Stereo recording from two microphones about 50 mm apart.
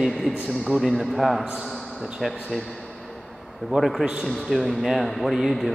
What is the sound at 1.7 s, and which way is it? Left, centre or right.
Basketball bounce, centre.